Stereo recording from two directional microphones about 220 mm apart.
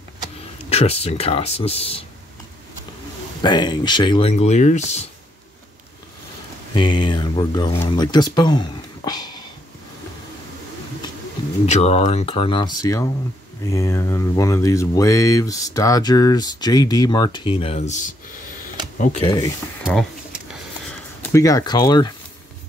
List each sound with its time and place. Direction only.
0.7 s speech: 30° left (ahead or behind)
3.4 s speech: 20° left (ahead or behind)
6.7 s speech: 20° left (ahead or behind)
11.6 s speech: 30° left (ahead or behind)
18.9 s speech: 25° left (ahead or behind)
19.8 s a sound: centre (ahead or behind)
21.3 s speech: 15° left (ahead or behind)